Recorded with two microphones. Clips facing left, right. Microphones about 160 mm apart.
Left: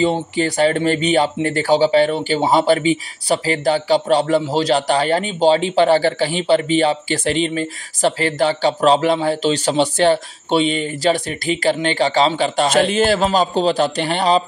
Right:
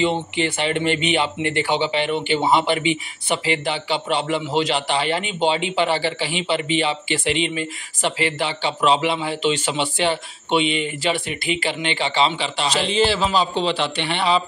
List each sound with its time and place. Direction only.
0.4 s speech: 40° left (ahead or behind)